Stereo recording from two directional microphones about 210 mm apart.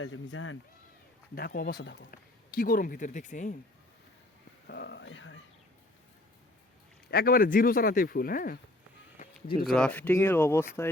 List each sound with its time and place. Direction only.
0.0 s speech: 70° left (ahead or behind)
1.4 s a man's voice: 45° left (ahead or behind)
4.6 s speech: 50° left (ahead or behind)
7.1 s a man's voice: 45° left (ahead or behind)
9.7 s speech: 5° left (ahead or behind)